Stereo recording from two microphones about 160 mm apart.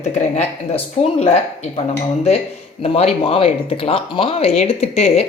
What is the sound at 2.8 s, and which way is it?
Speech, 40° left (ahead or behind).